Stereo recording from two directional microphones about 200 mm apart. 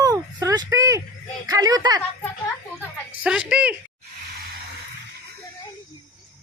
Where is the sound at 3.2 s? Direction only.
5° right (ahead or behind).